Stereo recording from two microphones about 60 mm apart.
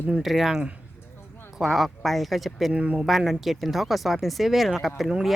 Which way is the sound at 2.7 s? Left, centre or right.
Right.